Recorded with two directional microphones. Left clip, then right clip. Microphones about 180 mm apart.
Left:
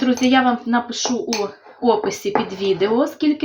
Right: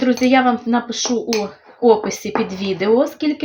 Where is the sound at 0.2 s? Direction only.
30° right (ahead or behind).